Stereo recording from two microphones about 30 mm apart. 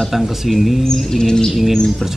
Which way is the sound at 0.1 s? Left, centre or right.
Centre.